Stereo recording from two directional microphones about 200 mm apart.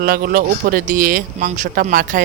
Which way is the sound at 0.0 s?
45° right (ahead or behind).